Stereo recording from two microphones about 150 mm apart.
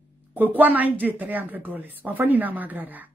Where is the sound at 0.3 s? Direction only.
10° right (ahead or behind).